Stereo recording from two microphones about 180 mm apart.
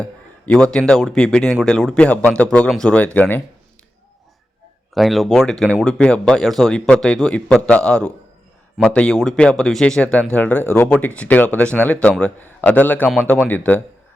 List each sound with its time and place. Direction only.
0.0 s a man's voice: 5° left (ahead or behind)
4.9 s a man's voice: centre (ahead or behind)